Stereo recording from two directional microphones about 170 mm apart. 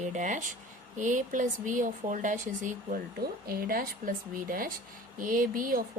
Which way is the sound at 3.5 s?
60° right (ahead or behind).